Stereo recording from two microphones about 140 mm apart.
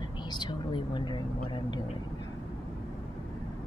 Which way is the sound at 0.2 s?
30° left (ahead or behind).